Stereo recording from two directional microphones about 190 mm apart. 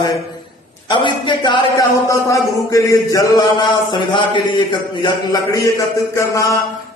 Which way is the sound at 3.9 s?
25° left (ahead or behind).